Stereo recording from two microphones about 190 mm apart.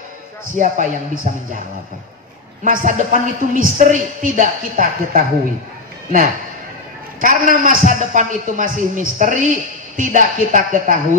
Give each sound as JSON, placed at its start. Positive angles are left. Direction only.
{"t": 0.6, "sound": "a woman's voice", "side_deg": -45}
{"t": 2.6, "sound": "a woman's voice", "side_deg": -45}
{"t": 7.2, "sound": "a woman's voice", "side_deg": -45}